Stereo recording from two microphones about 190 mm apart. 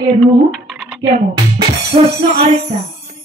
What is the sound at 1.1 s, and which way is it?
Music, 30° right (ahead or behind).